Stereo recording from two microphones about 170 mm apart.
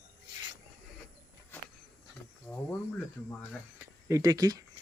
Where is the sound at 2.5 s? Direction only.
15° left (ahead or behind).